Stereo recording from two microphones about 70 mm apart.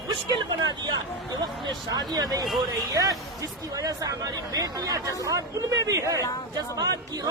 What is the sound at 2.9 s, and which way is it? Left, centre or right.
Speech, right.